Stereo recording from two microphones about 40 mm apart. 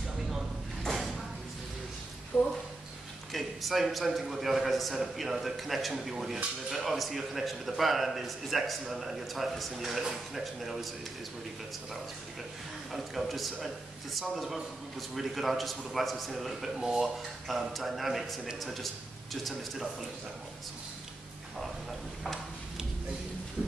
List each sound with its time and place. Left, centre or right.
2.3 s speech: left
3.3 s a man's voice: centre
12.9 s a man's voice: centre